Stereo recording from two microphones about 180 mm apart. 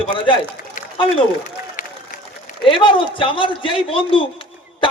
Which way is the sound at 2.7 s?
30° left (ahead or behind).